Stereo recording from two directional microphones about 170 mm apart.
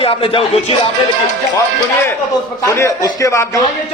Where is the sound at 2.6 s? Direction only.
20° left (ahead or behind).